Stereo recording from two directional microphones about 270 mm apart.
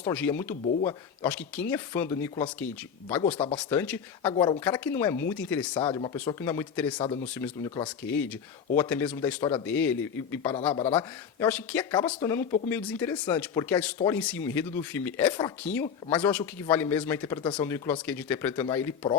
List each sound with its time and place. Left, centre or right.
0.0 s speech: centre
4.4 s speech: centre
4.6 s speech: centre
5.7 s speech: centre
6.9 s speech: centre
7.3 s speech: centre